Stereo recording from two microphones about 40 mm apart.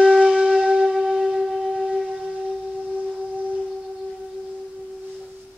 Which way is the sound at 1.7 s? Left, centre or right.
Right.